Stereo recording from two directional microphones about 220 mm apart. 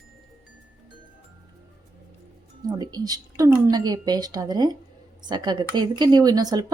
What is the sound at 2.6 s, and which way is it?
A woman's voice, 15° right (ahead or behind).